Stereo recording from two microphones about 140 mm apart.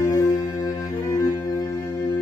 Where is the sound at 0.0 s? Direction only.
20° left (ahead or behind).